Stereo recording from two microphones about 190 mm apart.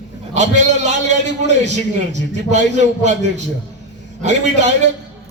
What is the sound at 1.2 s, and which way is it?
A man's voice, 35° right (ahead or behind).